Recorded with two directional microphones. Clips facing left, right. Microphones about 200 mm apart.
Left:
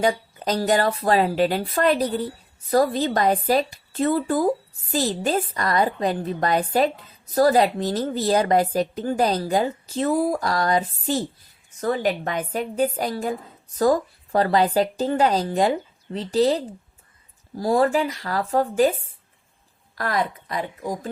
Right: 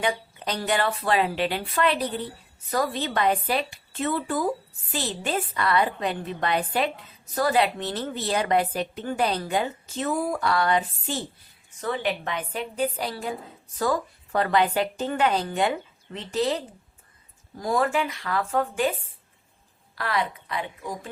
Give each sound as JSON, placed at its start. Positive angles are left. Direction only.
{"t": 0.0, "sound": "a woman's voice", "side_deg": 40}
{"t": 20.0, "sound": "a woman's voice", "side_deg": 45}